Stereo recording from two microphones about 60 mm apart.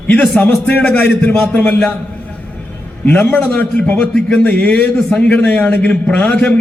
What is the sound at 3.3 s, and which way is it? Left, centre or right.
A man's voice, left.